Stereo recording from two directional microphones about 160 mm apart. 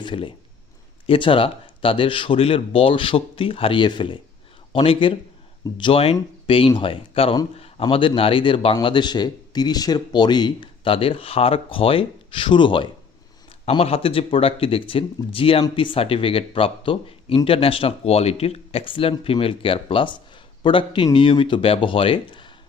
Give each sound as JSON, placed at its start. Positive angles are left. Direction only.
{"t": 0.0, "sound": "speech", "side_deg": 30}